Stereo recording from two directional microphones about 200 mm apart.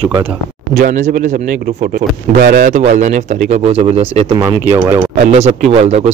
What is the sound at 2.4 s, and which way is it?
Speech, 40° right (ahead or behind).